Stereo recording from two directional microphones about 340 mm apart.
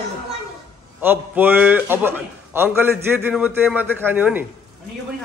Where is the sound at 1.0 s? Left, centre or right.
Centre.